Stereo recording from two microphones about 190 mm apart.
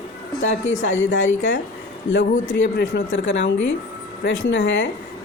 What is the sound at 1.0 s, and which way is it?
Speech, 80° left.